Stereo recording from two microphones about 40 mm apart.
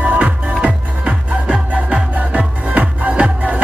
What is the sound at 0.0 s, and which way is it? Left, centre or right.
Music, right.